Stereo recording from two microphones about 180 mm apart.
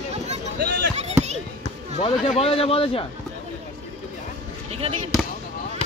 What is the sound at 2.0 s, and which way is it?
A man's voice, 30° left (ahead or behind).